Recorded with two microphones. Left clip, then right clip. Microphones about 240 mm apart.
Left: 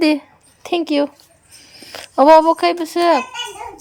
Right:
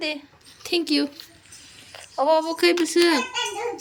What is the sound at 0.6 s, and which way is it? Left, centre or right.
Speech, centre.